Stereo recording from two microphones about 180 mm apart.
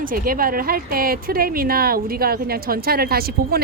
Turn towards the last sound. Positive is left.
turn(degrees=-60)  # may be behind; listen again after turning